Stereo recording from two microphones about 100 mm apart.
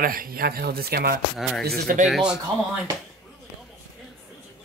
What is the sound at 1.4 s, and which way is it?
Speech, centre (ahead or behind).